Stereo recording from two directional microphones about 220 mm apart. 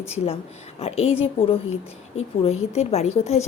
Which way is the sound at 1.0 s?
25° left (ahead or behind).